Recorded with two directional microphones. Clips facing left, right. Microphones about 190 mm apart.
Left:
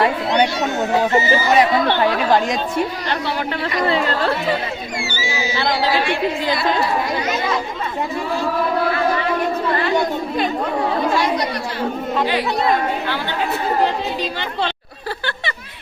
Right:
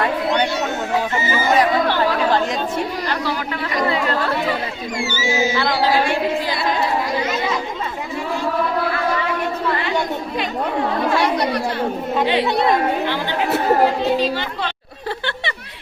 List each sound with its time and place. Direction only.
0.3 s speech: 15° left (ahead or behind)
1.2 s speech: 50° right (ahead or behind)
3.8 s speech: 30° left (ahead or behind)
4.9 s speech: 45° right (ahead or behind)
12.2 s speech: 25° right (ahead or behind)